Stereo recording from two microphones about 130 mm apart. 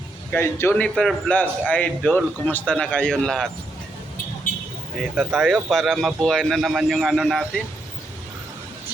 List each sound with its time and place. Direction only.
0.3 s a man's voice: 20° left (ahead or behind)
5.1 s a man's voice: centre (ahead or behind)